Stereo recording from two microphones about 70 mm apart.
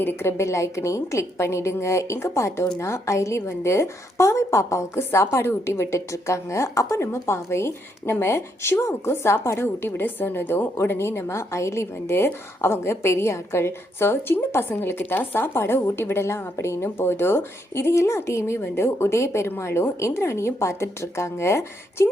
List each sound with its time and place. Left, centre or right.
0.0 s a woman's voice: left